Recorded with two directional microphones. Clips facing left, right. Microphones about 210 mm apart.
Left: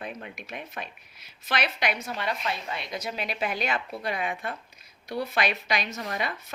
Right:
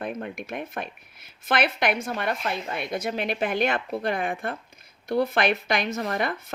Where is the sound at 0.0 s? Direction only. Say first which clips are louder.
Right 7 dB; 50° right (ahead or behind).